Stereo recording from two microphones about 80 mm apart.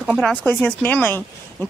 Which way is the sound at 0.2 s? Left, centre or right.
Centre.